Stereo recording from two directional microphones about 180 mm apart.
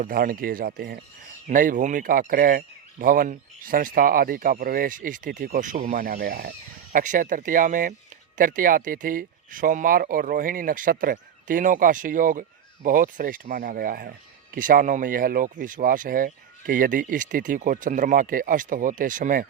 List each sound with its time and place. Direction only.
0.0 s speech: 50° right (ahead or behind)